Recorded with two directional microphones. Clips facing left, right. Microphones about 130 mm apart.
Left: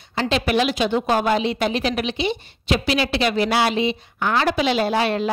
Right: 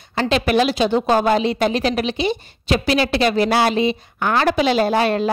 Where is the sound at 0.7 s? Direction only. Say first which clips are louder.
Right 3 dB; 35° right (ahead or behind).